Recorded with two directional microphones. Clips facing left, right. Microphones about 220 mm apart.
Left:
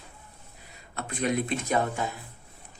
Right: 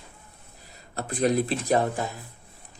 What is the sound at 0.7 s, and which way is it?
Speech, 35° right (ahead or behind).